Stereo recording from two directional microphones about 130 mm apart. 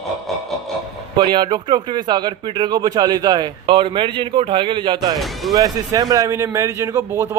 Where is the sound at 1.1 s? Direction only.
35° right (ahead or behind).